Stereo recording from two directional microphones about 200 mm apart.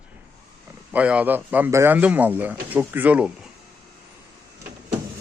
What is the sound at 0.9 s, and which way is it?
Speech, 5° right (ahead or behind).